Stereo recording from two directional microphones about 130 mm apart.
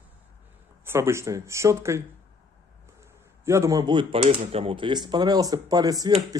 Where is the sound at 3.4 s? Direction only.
25° right (ahead or behind).